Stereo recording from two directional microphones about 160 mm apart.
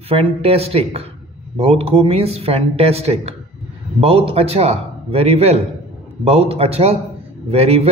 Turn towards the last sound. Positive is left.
turn(degrees=-40)  # may be behind; listen again after turning